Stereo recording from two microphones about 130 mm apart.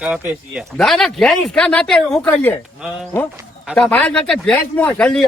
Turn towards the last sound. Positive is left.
turn(degrees=10)  # may be behind; listen again after turning